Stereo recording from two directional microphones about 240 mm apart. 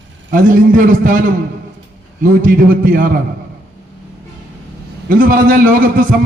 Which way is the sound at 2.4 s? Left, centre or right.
Right.